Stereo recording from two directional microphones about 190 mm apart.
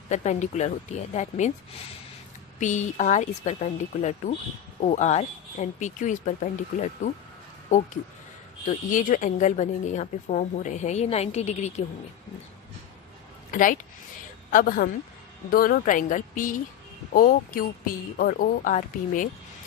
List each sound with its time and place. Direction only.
0.1 s a woman's voice: 40° left (ahead or behind)
2.6 s a woman's voice: 40° left (ahead or behind)
8.9 s a woman's voice: 45° left (ahead or behind)
13.5 s a woman's voice: 45° left (ahead or behind)